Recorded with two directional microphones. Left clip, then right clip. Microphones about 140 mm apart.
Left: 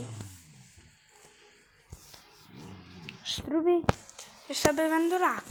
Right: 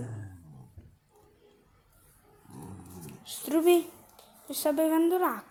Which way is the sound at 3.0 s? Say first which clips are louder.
Left 10 dB; 10° right (ahead or behind).